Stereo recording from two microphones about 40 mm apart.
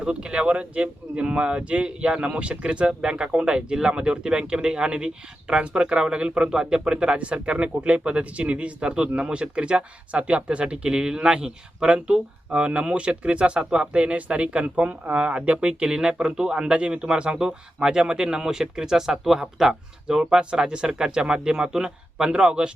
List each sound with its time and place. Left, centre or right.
0.0 s speech: right